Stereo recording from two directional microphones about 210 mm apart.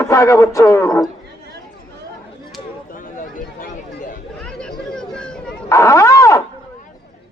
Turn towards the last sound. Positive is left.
turn(degrees=15)  # may be behind; listen again after turning